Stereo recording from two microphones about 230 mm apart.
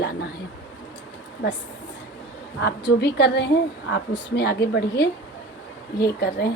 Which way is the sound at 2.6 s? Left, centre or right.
Left.